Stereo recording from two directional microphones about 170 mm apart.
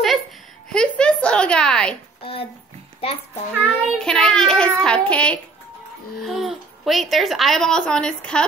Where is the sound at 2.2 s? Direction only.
35° left (ahead or behind).